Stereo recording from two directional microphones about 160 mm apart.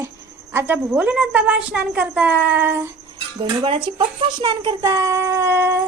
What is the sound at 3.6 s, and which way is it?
Speech, 35° right (ahead or behind).